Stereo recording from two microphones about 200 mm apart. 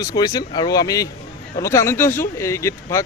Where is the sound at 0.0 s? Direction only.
20° left (ahead or behind).